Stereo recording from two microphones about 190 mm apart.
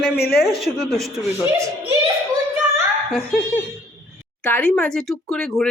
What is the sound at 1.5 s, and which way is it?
Speech, 15° right (ahead or behind).